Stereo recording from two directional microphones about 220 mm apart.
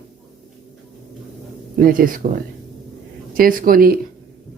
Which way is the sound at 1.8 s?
40° right (ahead or behind).